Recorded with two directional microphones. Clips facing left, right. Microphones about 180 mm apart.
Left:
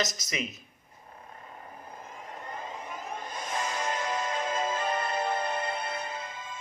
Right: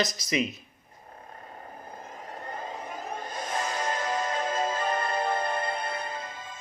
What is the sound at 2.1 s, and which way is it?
Vehicle, 35° right (ahead or behind).